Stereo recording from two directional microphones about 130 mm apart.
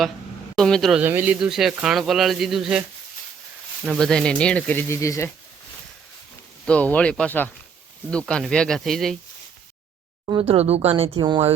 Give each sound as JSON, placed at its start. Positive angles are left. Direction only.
{"t": 0.5, "sound": "speech", "side_deg": 5}
{"t": 0.9, "sound": "speech", "side_deg": -15}
{"t": 3.8, "sound": "speech", "side_deg": 5}
{"t": 6.7, "sound": "speech", "side_deg": 10}
{"t": 10.4, "sound": "speech", "side_deg": -50}
{"t": 11.2, "sound": "speech", "side_deg": -35}